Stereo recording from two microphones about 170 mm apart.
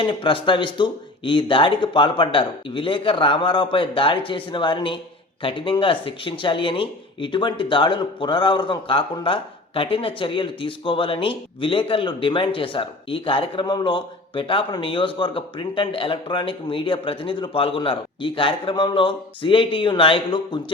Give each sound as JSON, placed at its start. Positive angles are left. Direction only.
{"t": 0.0, "sound": "speech", "side_deg": 30}